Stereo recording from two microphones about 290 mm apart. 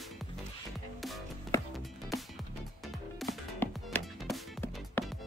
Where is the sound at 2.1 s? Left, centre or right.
Centre.